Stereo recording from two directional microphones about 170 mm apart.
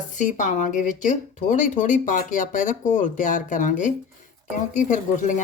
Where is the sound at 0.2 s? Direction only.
45° left (ahead or behind).